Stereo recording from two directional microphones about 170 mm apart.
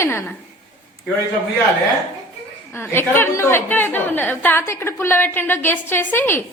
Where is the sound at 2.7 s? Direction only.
15° left (ahead or behind).